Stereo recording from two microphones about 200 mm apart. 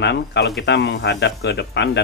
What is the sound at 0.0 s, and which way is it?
Speech, 60° left (ahead or behind).